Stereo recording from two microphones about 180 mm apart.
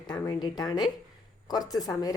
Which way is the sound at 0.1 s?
20° left (ahead or behind).